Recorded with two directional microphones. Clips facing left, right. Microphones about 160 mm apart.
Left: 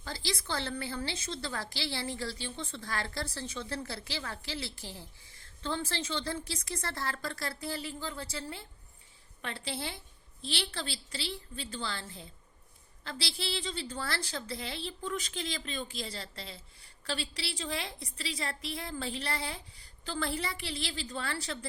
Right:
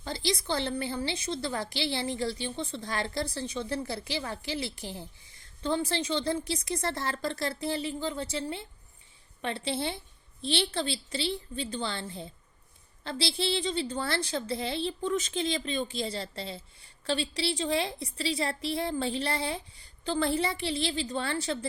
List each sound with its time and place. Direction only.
0.0 s a woman's voice: 20° right (ahead or behind)